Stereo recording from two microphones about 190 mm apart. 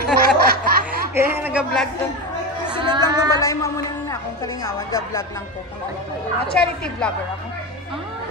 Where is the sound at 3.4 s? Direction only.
15° left (ahead or behind).